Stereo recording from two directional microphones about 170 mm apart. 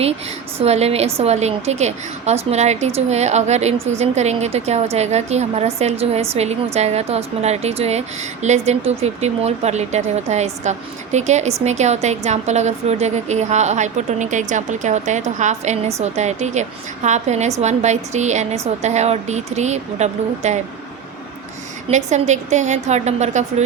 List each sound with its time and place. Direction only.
0.6 s a woman's voice: 40° right (ahead or behind)
21.8 s a woman's voice: 45° right (ahead or behind)